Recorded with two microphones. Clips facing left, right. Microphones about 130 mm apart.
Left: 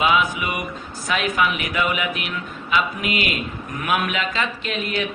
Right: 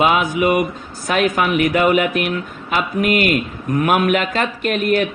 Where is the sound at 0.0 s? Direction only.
45° right (ahead or behind).